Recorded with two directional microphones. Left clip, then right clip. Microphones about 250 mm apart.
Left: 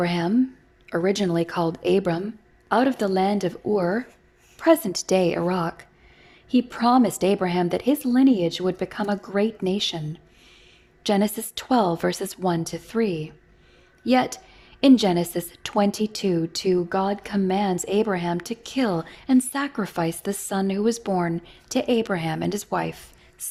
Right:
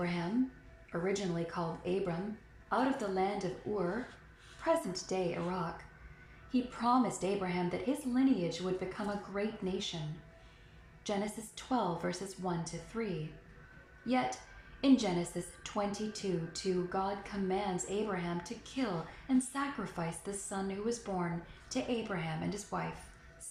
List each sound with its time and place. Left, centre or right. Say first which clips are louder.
0.0 s a woman's voice: left 13 dB; left
11.0 s a woman's voice: left 14 dB; left
14.1 s a woman's voice: left 12 dB; left